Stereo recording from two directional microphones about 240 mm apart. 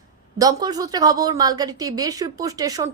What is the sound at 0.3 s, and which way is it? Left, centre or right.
A woman's voice, centre.